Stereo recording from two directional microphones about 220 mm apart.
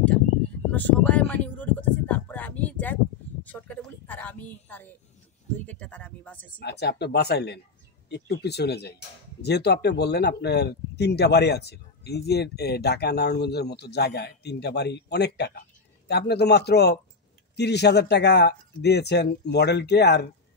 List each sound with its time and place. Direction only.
0.7 s a sound: 5° left (ahead or behind)
5.7 s speech: 5° left (ahead or behind)
6.6 s speech: 50° left (ahead or behind)